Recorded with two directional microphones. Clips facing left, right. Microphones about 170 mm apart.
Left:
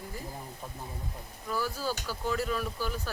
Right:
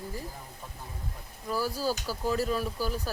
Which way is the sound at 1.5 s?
40° right (ahead or behind).